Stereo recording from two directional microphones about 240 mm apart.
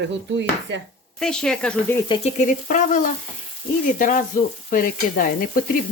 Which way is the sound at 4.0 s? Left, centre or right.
Left.